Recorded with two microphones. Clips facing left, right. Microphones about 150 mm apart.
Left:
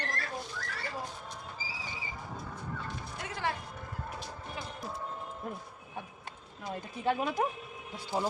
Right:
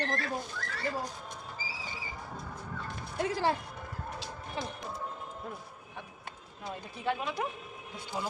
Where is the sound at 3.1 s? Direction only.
30° right (ahead or behind).